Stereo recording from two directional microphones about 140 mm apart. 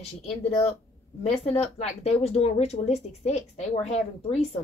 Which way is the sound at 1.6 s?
50° left (ahead or behind).